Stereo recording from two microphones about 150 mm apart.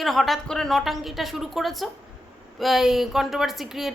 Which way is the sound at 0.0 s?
Centre (ahead or behind).